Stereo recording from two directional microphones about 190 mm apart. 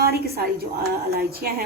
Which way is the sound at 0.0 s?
55° right (ahead or behind).